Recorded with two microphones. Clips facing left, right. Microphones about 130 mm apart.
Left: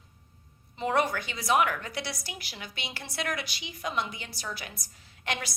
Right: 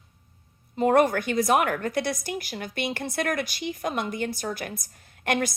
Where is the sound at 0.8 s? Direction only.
50° right (ahead or behind).